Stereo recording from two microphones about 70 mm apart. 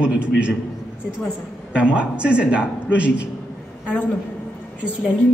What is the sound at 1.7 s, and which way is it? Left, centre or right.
Speech, centre.